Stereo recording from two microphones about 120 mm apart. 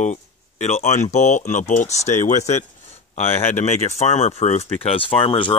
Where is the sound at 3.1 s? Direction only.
65° left (ahead or behind).